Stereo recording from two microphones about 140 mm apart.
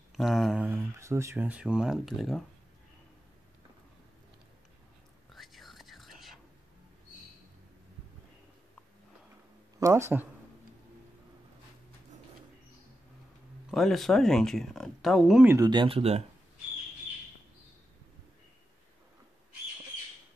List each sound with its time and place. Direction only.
0.1 s a sound: centre (ahead or behind)
0.7 s speech: 20° right (ahead or behind); by 2.4 s centre (ahead or behind)
5.3 s whispering: centre (ahead or behind)
9.8 s speech: 20° right (ahead or behind)
13.7 s speech: centre (ahead or behind)
15.4 s speech: 20° right (ahead or behind)
15.7 s speech: 40° right (ahead or behind)